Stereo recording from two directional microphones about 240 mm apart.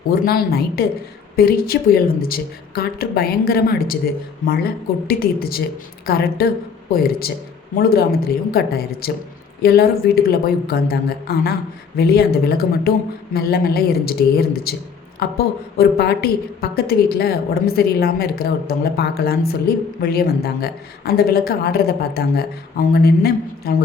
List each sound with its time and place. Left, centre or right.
0.1 s a woman's voice: left